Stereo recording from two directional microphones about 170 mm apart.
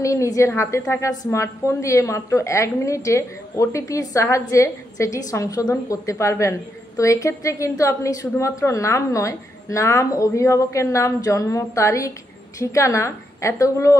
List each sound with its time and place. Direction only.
0.0 s a woman's voice: 20° left (ahead or behind)